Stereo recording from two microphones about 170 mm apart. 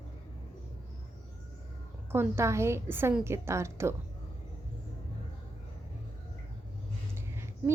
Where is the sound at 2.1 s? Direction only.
15° right (ahead or behind).